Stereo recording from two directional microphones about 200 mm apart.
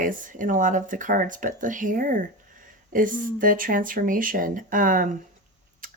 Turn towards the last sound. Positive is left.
turn(degrees=-45)  # may be behind; listen again after turning